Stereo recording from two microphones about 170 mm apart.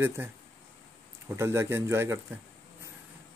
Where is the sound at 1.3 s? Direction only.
15° right (ahead or behind).